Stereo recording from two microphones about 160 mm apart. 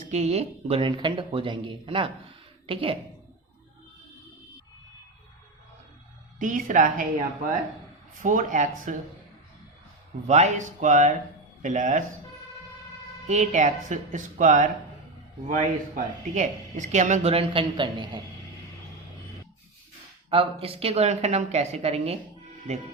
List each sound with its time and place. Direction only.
0.1 s speech: 40° right (ahead or behind)
6.4 s a woman's voice: 55° right (ahead or behind)
8.2 s a woman's voice: 55° right (ahead or behind)
10.2 s a woman's voice: 45° right (ahead or behind)
13.2 s a woman's voice: 50° right (ahead or behind)
16.0 s a woman's voice: 50° right (ahead or behind); by 18.2 s 30° right (ahead or behind)
20.3 s speech: 35° right (ahead or behind)